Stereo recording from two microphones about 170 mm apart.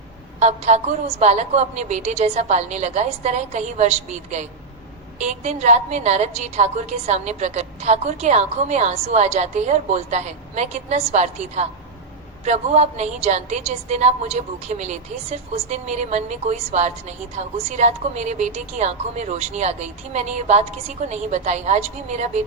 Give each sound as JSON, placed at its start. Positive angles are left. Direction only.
{"t": 0.3, "sound": "a woman's voice", "side_deg": -40}